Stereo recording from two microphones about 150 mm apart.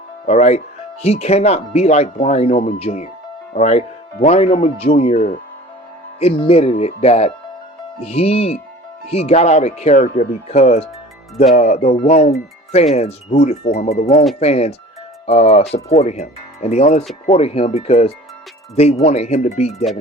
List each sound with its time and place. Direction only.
0.3 s speech: 50° left (ahead or behind)
6.1 s speech: 40° left (ahead or behind)